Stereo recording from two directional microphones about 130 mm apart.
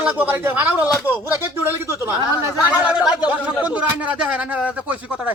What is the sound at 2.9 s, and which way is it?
A man's voice, 5° right (ahead or behind).